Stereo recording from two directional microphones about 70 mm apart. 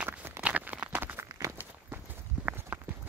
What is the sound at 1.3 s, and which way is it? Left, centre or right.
Walk, right.